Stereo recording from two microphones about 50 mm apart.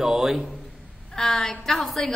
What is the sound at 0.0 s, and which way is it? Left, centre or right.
Speech, centre.